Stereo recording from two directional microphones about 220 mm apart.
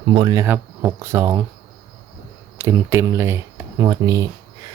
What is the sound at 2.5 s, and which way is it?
Speech, 10° right (ahead or behind).